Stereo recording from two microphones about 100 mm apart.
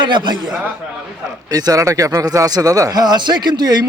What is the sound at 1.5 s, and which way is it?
A man's voice, 40° right (ahead or behind).